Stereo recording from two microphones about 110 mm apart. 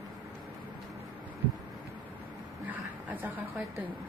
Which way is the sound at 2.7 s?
15° right (ahead or behind).